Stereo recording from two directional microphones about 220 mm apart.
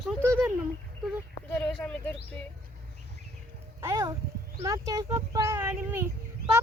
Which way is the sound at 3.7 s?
15° right (ahead or behind).